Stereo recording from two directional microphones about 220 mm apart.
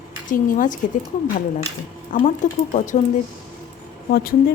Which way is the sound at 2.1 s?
35° left (ahead or behind).